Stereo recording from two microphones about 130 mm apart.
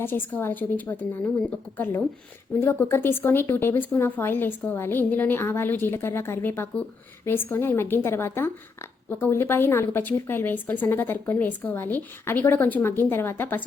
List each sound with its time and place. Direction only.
0.0 s a woman's voice: 15° left (ahead or behind)